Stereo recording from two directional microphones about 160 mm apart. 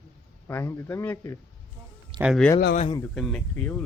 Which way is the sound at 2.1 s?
30° right (ahead or behind).